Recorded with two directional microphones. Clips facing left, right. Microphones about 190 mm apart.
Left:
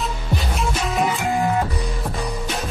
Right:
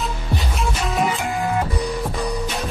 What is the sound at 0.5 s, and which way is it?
Music, centre (ahead or behind).